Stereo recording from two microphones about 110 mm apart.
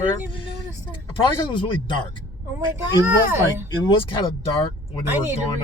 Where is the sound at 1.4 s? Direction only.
50° left (ahead or behind).